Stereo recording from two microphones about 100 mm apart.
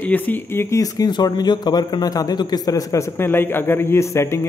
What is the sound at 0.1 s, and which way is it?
Speech, 20° left (ahead or behind).